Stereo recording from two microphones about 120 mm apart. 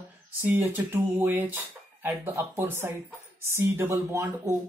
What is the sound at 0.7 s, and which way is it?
Speech, 15° right (ahead or behind).